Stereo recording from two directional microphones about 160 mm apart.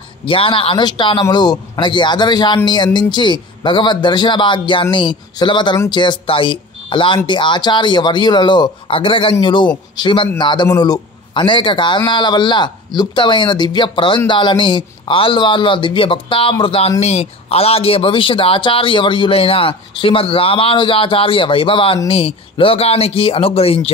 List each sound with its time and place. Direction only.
0.2 s speech: 35° left (ahead or behind)